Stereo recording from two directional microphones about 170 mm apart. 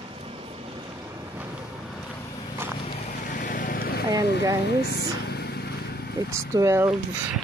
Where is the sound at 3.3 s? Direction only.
55° left (ahead or behind).